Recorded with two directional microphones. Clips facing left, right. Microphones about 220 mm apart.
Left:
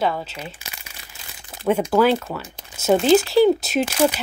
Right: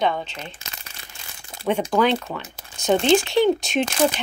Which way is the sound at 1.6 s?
5° left (ahead or behind).